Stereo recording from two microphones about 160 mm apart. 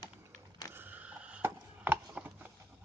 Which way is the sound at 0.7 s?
10° right (ahead or behind).